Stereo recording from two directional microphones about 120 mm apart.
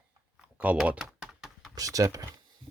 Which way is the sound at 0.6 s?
10° right (ahead or behind).